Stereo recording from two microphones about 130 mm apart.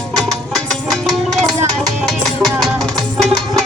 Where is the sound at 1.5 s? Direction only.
30° right (ahead or behind).